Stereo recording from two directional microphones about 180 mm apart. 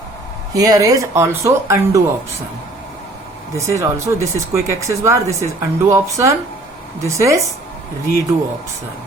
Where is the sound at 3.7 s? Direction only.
15° right (ahead or behind).